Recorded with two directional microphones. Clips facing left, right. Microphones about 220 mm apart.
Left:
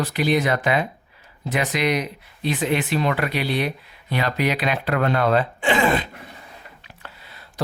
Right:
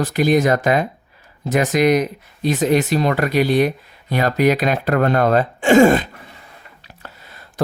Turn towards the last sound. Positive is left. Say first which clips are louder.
# right 5 dB
turn(degrees=-45)  # may be behind; listen again after turning